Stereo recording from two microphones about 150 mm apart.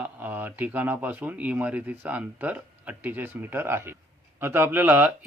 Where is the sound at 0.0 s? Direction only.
10° right (ahead or behind).